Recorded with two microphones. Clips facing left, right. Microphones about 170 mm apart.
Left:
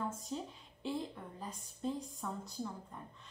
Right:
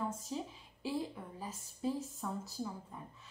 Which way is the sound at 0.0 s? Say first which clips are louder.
Right 1 dB; centre (ahead or behind).